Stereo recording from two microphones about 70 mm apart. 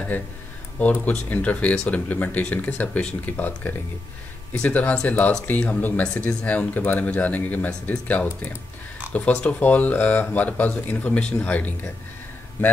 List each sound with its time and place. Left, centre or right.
1.0 s speech: centre